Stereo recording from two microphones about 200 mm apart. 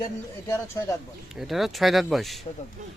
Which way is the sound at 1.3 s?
Centre (ahead or behind).